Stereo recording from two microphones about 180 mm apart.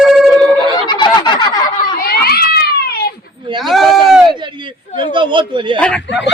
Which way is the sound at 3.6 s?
Centre (ahead or behind).